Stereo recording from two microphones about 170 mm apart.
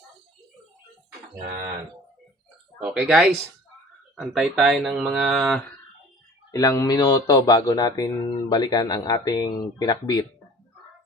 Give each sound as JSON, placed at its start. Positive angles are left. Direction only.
{"t": 2.7, "sound": "speech", "side_deg": -5}
{"t": 6.5, "sound": "speech", "side_deg": 20}